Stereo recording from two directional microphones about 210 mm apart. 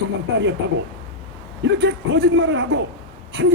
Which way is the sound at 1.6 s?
55° right (ahead or behind).